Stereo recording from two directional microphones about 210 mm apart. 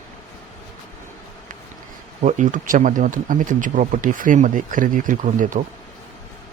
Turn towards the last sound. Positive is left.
turn(degrees=-40)  # may be behind; listen again after turning